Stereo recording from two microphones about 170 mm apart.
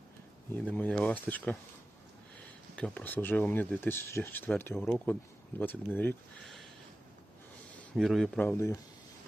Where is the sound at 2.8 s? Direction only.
10° left (ahead or behind).